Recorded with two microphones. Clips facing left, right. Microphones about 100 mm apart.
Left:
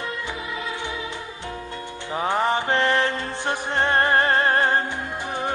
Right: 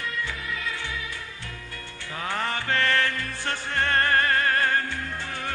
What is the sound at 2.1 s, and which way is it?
Music, 20° left (ahead or behind).